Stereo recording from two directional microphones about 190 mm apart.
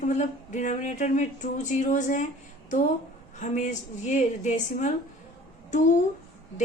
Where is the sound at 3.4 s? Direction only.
40° left (ahead or behind).